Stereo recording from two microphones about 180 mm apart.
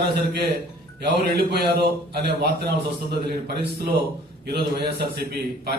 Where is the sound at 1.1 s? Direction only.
60° right (ahead or behind).